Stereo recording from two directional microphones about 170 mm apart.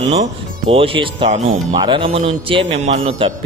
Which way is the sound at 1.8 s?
30° right (ahead or behind).